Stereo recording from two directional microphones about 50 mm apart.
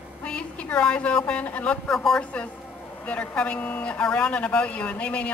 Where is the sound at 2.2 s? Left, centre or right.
Left.